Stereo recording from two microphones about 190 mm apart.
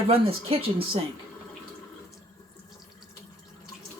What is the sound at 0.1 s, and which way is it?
Speech, 30° right (ahead or behind).